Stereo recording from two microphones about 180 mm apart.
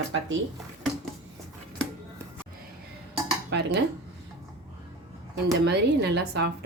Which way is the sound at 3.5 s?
70° right (ahead or behind).